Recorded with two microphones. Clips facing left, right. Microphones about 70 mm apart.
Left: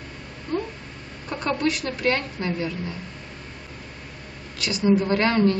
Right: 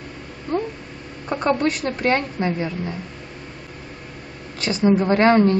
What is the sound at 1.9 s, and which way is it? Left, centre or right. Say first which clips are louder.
Speech: right 4 dB; right.